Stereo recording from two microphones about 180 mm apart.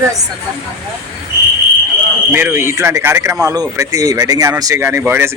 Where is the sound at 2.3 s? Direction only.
10° right (ahead or behind).